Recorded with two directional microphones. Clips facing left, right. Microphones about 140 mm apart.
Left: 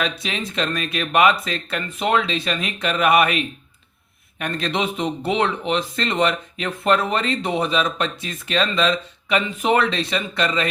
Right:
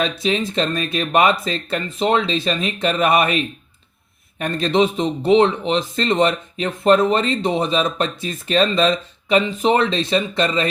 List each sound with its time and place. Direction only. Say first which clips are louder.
0.0 s speech: right 5 dB; 35° right (ahead or behind)